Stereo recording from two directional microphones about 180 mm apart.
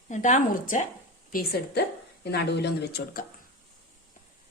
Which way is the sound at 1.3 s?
60° left (ahead or behind).